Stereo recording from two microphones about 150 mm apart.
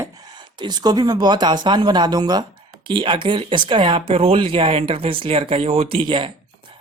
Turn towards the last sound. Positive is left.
turn(degrees=-35)  # may be behind; listen again after turning